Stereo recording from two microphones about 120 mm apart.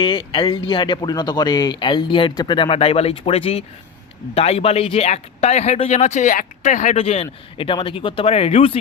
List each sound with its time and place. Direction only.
0.0 s speech: 45° left (ahead or behind); by 6.9 s 90° left
6.9 s speech: 55° left (ahead or behind)
8.3 s speech: 60° left (ahead or behind)